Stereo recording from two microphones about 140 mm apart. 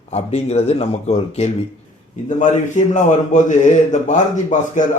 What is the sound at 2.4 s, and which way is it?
A man's voice, 60° left (ahead or behind).